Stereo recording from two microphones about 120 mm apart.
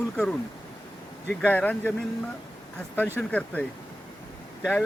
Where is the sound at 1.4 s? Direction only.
15° left (ahead or behind).